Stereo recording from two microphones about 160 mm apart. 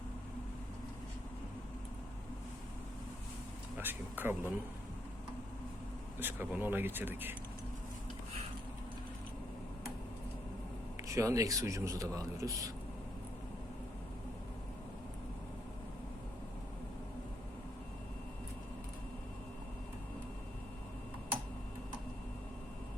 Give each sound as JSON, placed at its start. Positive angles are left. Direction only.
{"t": 3.8, "sound": "speech", "side_deg": -10}
{"t": 6.1, "sound": "speech", "side_deg": -10}
{"t": 11.1, "sound": "speech", "side_deg": -20}